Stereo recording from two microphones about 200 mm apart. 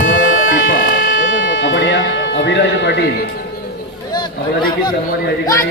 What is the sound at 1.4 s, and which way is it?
Music, 65° left (ahead or behind).